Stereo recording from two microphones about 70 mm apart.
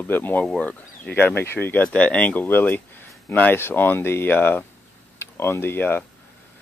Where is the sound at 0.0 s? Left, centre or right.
Left.